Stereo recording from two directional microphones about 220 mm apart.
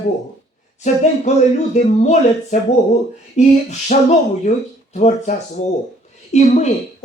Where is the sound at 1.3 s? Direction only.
30° left (ahead or behind).